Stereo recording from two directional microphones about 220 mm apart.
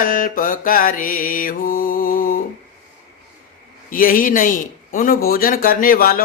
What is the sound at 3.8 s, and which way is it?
Mantra, 40° left (ahead or behind).